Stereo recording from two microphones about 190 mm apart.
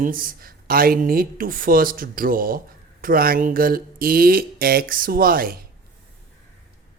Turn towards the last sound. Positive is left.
turn(degrees=-50)  # may be behind; listen again after turning